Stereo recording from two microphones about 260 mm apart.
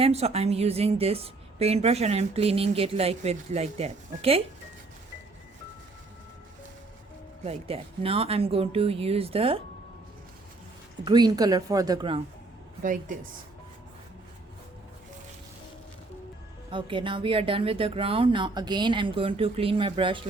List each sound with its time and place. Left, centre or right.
0.0 s a woman's voice: right
7.4 s a woman's voice: right
11.0 s speech: centre
12.8 s a woman's voice: right
16.7 s a woman's voice: centre